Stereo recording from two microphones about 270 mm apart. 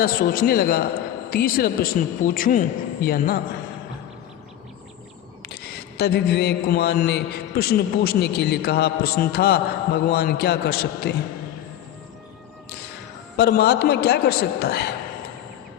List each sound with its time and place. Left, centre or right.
0.0 s a man's voice: left
6.0 s a man's voice: left
13.3 s a man's voice: left